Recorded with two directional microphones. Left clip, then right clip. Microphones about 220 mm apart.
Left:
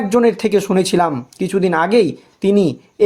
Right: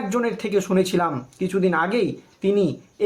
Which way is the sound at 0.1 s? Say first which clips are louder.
Left 9 dB; 45° left (ahead or behind).